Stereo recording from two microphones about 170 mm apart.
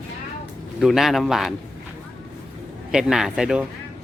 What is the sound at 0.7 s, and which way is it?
Speech, centre (ahead or behind).